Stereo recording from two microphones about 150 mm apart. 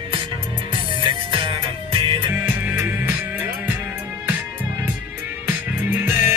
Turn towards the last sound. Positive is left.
turn(degrees=-15)  # may be behind; listen again after turning